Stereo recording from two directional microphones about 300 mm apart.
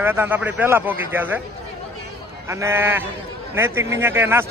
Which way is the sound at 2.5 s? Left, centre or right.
Centre.